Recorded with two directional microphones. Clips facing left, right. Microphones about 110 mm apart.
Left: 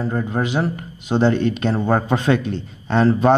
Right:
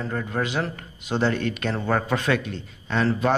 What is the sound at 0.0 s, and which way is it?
Speech, 25° left (ahead or behind).